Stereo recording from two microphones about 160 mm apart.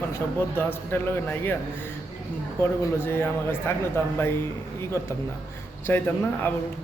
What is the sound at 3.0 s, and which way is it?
Speech, 15° left (ahead or behind).